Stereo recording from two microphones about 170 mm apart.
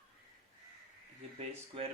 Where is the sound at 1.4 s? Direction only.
35° right (ahead or behind).